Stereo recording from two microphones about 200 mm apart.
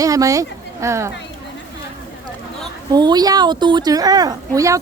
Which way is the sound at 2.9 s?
20° right (ahead or behind).